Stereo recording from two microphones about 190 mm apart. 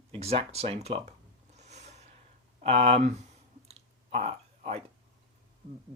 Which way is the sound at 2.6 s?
35° right (ahead or behind).